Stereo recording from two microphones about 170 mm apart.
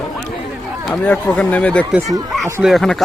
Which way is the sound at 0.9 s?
10° left (ahead or behind).